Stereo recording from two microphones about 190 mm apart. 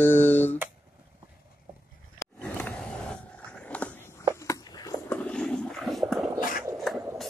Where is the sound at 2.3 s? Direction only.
5° left (ahead or behind).